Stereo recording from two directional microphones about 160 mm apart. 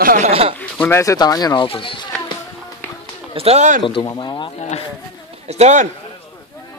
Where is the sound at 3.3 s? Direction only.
40° right (ahead or behind).